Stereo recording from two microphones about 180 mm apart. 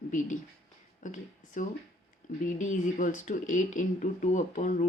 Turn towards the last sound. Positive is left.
turn(degrees=45)  # may be behind; listen again after turning